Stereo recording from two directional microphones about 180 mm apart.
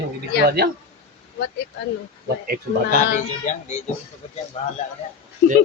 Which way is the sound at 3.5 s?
45° left (ahead or behind).